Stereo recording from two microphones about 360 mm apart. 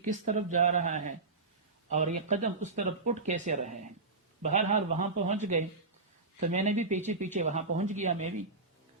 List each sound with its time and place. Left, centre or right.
0.0 s speech: centre